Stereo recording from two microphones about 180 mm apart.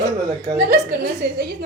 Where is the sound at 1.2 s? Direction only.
65° right (ahead or behind).